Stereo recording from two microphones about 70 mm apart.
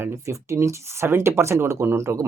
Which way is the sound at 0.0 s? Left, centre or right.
Right.